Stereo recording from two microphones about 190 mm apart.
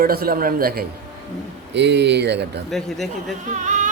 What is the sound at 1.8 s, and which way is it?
Speech, 65° right (ahead or behind).